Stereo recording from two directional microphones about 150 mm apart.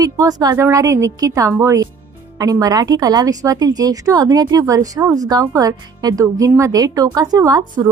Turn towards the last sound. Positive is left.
turn(degrees=-25)  # may be behind; listen again after turning